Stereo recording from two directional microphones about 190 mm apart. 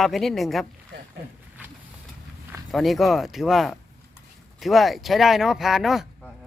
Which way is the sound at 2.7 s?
Centre (ahead or behind).